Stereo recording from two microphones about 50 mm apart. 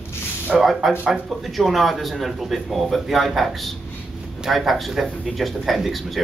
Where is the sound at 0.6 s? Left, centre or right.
Centre.